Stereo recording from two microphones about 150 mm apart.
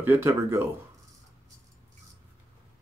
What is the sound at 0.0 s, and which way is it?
Speech, 20° right (ahead or behind).